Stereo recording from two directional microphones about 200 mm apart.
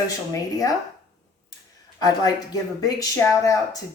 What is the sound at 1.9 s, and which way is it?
A woman's voice, 20° left (ahead or behind).